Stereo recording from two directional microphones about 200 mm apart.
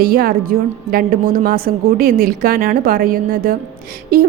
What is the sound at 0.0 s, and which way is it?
A woman's voice, 50° right (ahead or behind).